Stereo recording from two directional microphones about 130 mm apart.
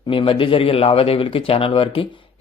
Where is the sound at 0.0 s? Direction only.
40° left (ahead or behind).